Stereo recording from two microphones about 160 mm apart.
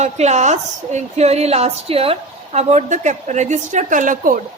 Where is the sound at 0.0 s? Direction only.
45° right (ahead or behind).